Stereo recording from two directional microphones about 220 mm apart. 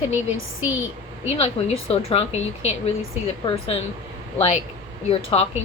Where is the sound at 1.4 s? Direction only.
30° left (ahead or behind).